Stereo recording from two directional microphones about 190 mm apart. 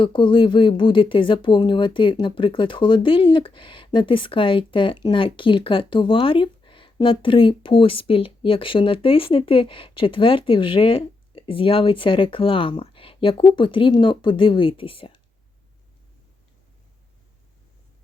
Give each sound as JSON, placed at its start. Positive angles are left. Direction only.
{"t": 0.0, "sound": "speech", "side_deg": 25}